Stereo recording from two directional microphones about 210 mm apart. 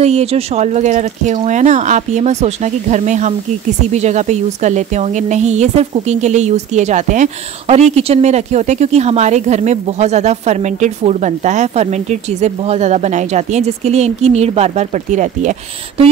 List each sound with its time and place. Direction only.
0.0 s speech: 30° right (ahead or behind)